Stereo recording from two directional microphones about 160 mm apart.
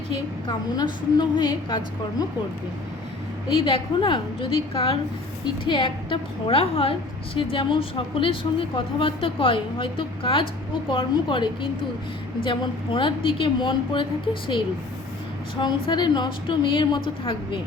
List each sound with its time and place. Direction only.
0.4 s a woman's voice: 25° left (ahead or behind)
3.5 s a woman's voice: 35° left (ahead or behind)
15.6 s a woman's voice: 30° left (ahead or behind)